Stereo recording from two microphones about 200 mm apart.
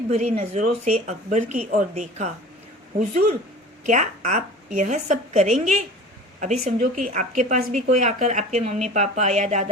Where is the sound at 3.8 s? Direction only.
40° right (ahead or behind).